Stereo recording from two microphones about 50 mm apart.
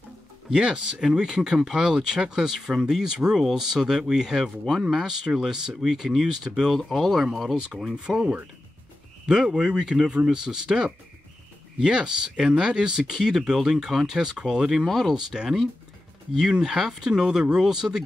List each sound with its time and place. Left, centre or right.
0.5 s speech: centre
6.7 s speech: centre
9.2 s speech: centre
14.9 s speech: centre
15.1 s speech: centre
16.6 s speech: centre